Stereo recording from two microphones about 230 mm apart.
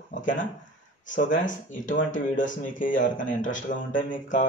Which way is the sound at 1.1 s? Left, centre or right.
Left.